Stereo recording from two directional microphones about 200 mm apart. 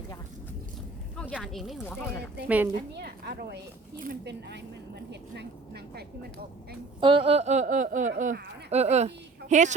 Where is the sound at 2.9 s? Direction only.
55° right (ahead or behind).